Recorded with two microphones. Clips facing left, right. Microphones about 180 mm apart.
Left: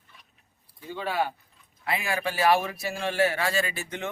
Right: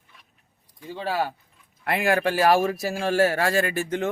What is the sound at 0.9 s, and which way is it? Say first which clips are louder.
Speech: right 2 dB; 35° right (ahead or behind).